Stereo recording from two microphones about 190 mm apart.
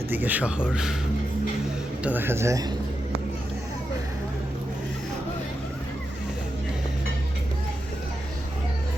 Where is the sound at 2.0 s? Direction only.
10° right (ahead or behind).